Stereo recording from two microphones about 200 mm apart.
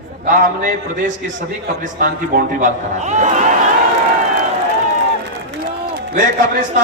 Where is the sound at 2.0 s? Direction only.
40° right (ahead or behind).